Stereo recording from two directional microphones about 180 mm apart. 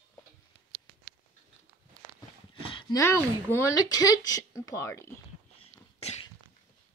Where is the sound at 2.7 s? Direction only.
25° left (ahead or behind).